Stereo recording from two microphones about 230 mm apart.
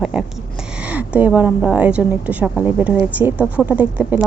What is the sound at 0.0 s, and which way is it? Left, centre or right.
A woman's voice, centre.